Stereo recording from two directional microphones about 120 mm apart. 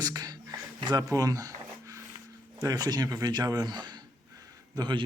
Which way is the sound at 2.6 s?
30° right (ahead or behind).